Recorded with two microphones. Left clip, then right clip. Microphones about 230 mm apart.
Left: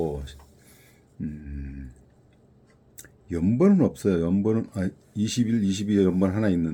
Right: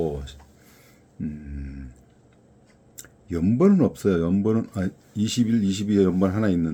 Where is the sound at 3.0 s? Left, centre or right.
Centre.